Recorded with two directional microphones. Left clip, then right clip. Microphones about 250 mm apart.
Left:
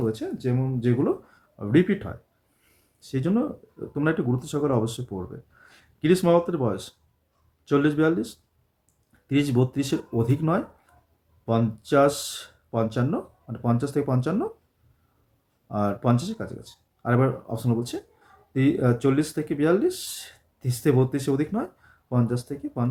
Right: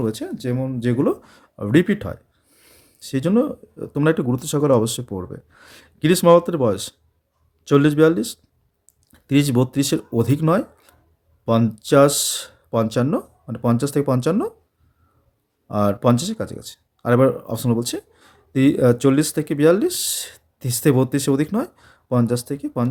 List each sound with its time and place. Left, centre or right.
0.0 s speech: right
15.7 s speech: right